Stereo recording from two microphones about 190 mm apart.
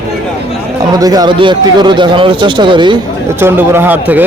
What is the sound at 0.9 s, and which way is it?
Speech, 20° right (ahead or behind).